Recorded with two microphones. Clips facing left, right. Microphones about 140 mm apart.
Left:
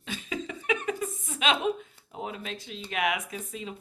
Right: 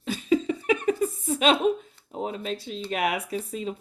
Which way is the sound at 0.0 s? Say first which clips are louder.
Right 11 dB; 35° right (ahead or behind).